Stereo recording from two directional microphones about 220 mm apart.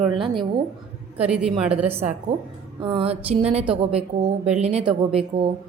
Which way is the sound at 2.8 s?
25° right (ahead or behind).